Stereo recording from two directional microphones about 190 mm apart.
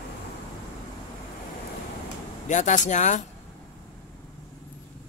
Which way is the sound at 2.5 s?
40° left (ahead or behind).